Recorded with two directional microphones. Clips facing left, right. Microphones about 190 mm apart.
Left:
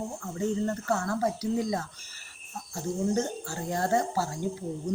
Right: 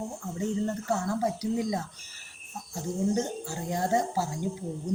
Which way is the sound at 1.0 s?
15° right (ahead or behind).